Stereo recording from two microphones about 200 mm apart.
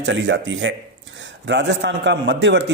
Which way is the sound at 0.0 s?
65° right (ahead or behind).